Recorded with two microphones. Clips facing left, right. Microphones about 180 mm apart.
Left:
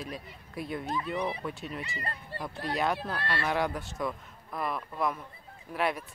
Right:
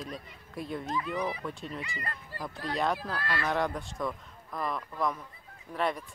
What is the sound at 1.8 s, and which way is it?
Speech, 25° left (ahead or behind).